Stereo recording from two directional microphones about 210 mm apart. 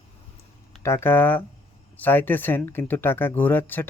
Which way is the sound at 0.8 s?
10° left (ahead or behind).